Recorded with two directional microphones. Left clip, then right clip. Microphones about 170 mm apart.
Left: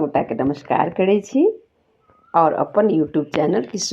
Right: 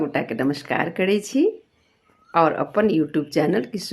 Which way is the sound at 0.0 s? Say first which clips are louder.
Left 4 dB; 5° right (ahead or behind).